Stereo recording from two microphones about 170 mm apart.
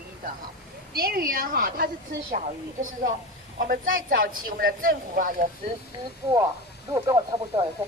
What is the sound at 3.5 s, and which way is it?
Speech, 55° right (ahead or behind).